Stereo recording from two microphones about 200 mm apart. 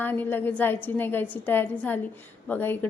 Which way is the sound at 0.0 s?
10° left (ahead or behind).